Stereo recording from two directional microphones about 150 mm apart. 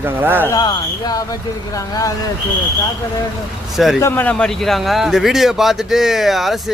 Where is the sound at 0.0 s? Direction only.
15° right (ahead or behind).